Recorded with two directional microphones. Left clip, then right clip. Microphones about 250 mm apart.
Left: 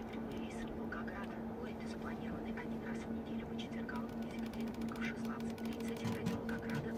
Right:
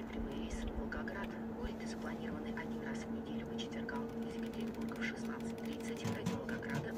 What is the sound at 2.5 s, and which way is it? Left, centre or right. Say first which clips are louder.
Vehicle: right 1 dB; centre.